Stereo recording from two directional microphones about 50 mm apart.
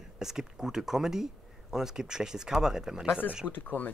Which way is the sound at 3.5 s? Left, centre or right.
Left.